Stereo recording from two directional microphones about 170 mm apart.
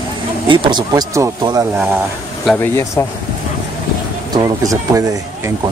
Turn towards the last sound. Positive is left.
turn(degrees=-20)  # may be behind; listen again after turning